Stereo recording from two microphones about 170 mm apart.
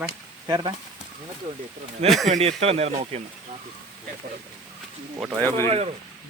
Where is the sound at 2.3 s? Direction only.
35° right (ahead or behind).